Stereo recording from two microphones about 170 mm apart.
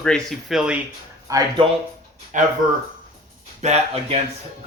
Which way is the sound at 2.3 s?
50° right (ahead or behind).